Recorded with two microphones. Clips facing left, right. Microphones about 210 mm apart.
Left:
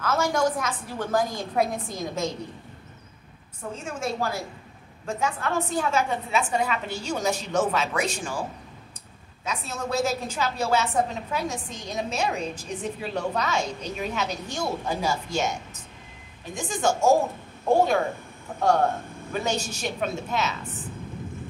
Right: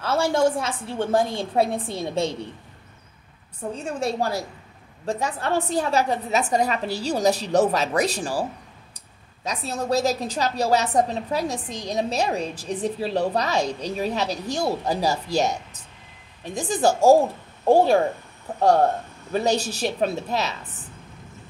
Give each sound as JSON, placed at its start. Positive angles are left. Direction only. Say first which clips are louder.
{"t": 0.0, "sound": "a woman's voice", "louder": "right 3 dB", "side_deg": -30}
{"t": 3.7, "sound": "a woman's voice", "louder": "right 4 dB", "side_deg": -35}
{"t": 19.3, "sound": "a woman's voice", "louder": "right 6 dB", "side_deg": -35}